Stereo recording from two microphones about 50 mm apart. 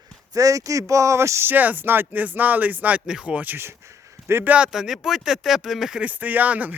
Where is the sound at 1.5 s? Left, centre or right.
Right.